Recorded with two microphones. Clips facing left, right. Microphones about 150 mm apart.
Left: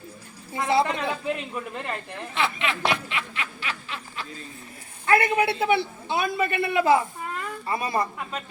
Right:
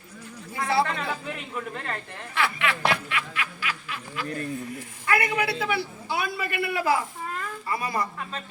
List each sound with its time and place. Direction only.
0.5 s a woman's voice: 20° left (ahead or behind)
4.3 s speech: 70° right (ahead or behind)
5.0 s a man's voice: 30° left (ahead or behind)